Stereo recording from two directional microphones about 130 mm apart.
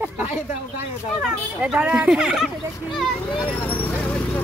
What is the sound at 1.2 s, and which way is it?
Speech, 5° right (ahead or behind).